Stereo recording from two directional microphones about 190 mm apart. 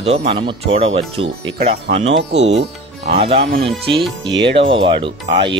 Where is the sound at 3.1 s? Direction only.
30° right (ahead or behind).